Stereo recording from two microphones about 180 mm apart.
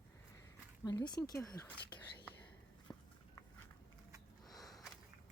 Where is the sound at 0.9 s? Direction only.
20° left (ahead or behind).